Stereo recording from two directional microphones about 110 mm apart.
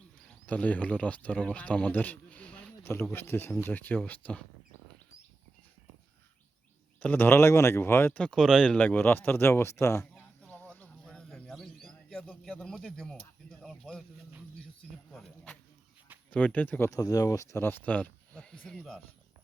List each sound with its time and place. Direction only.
0.3 s speech: 15° left (ahead or behind)
7.0 s speech: 15° left (ahead or behind)
8.2 s speech: 5° left (ahead or behind); by 10.1 s 25° left (ahead or behind)
10.2 s bird: 15° left (ahead or behind)
13.6 s speech: 5° left (ahead or behind)
15.1 s speech: 5° left (ahead or behind)
16.9 s speech: 35° left (ahead or behind); by 18.9 s 5° left (ahead or behind)